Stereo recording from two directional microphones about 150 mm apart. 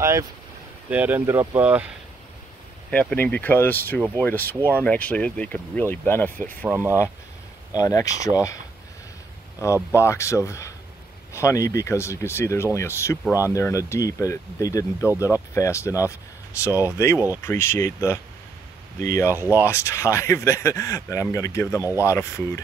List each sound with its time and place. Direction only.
0.8 s speech: 10° right (ahead or behind)
2.9 s speech: 10° left (ahead or behind)
6.7 s speech: 15° right (ahead or behind)
7.7 s speech: 25° left (ahead or behind)
9.6 s speech: 20° left (ahead or behind)
19.3 s speech: 15° right (ahead or behind)
19.6 s speech: 20° left (ahead or behind)